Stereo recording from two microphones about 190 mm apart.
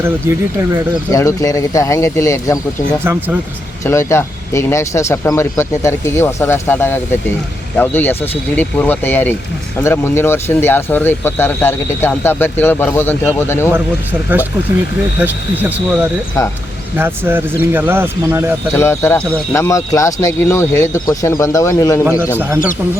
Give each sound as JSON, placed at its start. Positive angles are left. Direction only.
{"t": 0.0, "sound": "speech", "side_deg": -15}
{"t": 1.1, "sound": "speech", "side_deg": 15}
{"t": 3.0, "sound": "speech", "side_deg": -10}
{"t": 3.8, "sound": "speech", "side_deg": 15}
{"t": 13.7, "sound": "speech", "side_deg": -10}
{"t": 17.0, "sound": "speech", "side_deg": -10}
{"t": 18.7, "sound": "speech", "side_deg": 15}
{"t": 22.4, "sound": "speech", "side_deg": -15}